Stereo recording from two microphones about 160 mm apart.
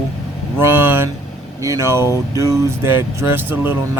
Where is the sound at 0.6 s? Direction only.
15° right (ahead or behind).